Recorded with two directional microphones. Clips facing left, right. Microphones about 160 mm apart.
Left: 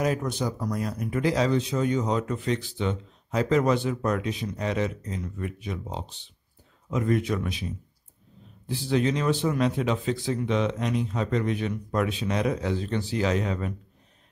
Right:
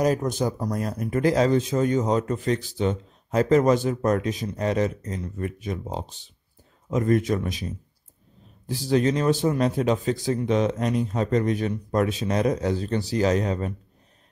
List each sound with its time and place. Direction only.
0.0 s speech: 40° right (ahead or behind)
8.6 s a man's voice: 40° right (ahead or behind)